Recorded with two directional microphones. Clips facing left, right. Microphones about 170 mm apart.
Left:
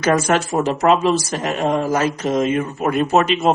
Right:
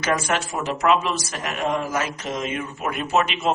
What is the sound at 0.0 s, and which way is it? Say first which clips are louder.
Speech: left 7 dB; 40° left (ahead or behind).